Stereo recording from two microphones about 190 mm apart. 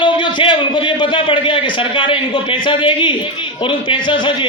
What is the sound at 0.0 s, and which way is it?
A man's voice, 25° left (ahead or behind).